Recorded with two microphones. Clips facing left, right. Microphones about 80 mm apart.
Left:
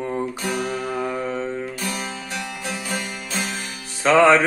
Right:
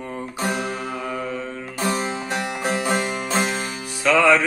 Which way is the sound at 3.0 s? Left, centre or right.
Right.